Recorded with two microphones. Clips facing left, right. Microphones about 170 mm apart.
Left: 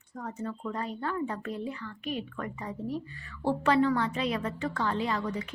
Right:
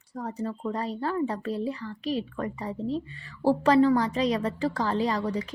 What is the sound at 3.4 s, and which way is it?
A woman's voice, 35° right (ahead or behind).